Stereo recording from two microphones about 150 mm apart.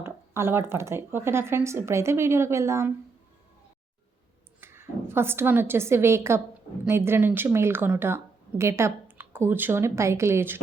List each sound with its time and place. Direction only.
0.0 s a woman's voice: 15° right (ahead or behind)
4.6 s a woman's voice: 15° right (ahead or behind)